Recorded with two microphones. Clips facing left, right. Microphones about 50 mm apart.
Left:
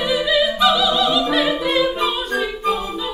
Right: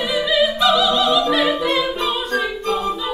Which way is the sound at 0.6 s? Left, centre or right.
Centre.